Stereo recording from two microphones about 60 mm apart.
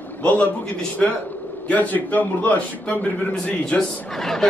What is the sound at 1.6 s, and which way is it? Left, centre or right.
Speech, left.